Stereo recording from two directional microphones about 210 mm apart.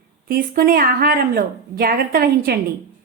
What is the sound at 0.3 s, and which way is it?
A woman's voice, 45° right (ahead or behind).